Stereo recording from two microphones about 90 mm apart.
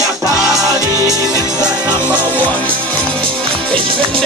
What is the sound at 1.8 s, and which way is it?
Music, 25° left (ahead or behind).